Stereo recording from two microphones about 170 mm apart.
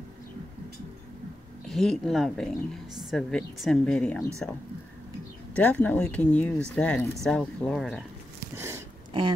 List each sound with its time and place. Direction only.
1.7 s a woman's voice: 5° left (ahead or behind)
5.6 s a woman's voice: 10° left (ahead or behind)
8.4 s a sound: 15° right (ahead or behind)